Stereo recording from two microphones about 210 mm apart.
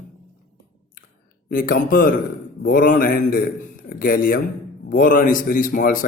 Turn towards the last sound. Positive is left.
turn(degrees=40)  # may be behind; listen again after turning